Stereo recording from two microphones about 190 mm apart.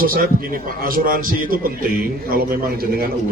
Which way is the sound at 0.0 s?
50° right (ahead or behind).